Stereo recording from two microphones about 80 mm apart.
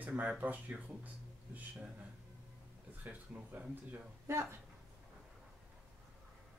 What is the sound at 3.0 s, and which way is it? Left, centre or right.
Speech, right.